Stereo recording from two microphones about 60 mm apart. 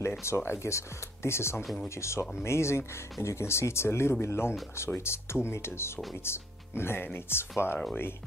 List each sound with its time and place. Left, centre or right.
0.2 s speech: left